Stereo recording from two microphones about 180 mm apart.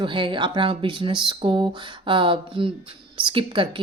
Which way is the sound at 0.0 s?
25° right (ahead or behind).